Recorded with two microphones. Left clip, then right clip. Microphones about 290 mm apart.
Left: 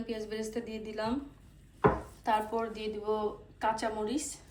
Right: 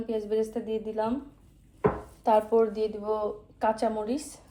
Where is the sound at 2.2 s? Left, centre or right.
Centre.